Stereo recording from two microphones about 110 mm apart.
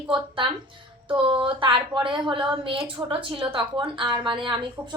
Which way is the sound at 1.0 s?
50° right (ahead or behind).